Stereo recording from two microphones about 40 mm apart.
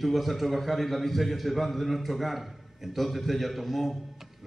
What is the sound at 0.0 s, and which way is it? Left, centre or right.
A man's voice, centre.